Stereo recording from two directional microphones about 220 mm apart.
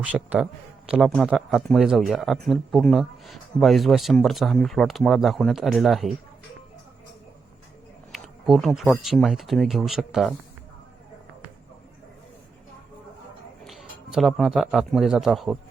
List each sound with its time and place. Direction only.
0.0 s speech: 5° right (ahead or behind)
8.1 s speech: centre (ahead or behind)
13.7 s a man's voice: centre (ahead or behind)